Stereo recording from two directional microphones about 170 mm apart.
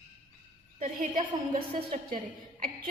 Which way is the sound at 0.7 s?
45° right (ahead or behind).